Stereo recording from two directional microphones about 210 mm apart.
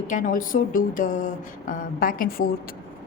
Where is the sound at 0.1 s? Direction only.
40° left (ahead or behind).